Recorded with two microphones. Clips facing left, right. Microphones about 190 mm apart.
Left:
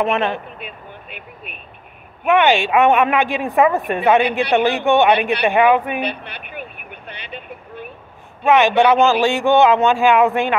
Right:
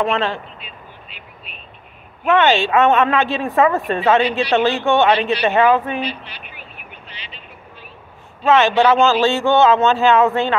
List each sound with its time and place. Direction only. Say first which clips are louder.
0.0 s speech: left 1 dB; 20° left (ahead or behind)
0.6 s vehicle: left 5 dB; 55° left (ahead or behind)
2.2 s a man's voice: even; 15° left (ahead or behind)
4.2 s a woman's voice: even; 60° left (ahead or behind)
4.6 s a man's voice: left 1 dB; 15° left (ahead or behind)
5.9 s vehicle: left 1 dB; 60° left (ahead or behind)
8.5 s a man's voice: even; 15° left (ahead or behind)